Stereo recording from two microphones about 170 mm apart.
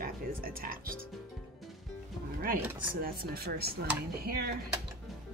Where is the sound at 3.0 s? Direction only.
65° right (ahead or behind).